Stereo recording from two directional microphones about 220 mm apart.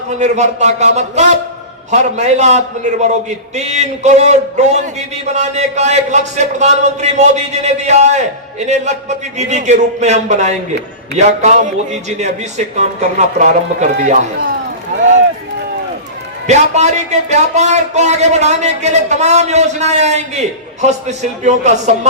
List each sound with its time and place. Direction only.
0.2 s a man's voice: 30° right (ahead or behind)
16.5 s a man's voice: 30° right (ahead or behind)